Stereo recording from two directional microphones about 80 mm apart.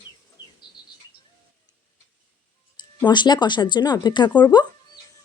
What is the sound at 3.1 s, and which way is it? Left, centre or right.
Speech, left.